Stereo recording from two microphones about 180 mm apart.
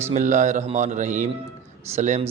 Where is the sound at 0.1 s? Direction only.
40° right (ahead or behind).